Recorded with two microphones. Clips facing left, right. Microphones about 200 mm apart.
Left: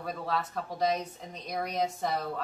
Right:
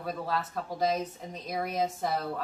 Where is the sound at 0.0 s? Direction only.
Centre (ahead or behind).